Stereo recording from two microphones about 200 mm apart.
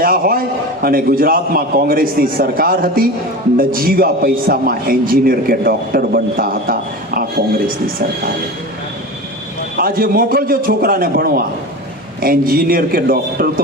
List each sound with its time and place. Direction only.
0.0 s a man's voice: 45° right (ahead or behind)
9.7 s a man's voice: 45° right (ahead or behind)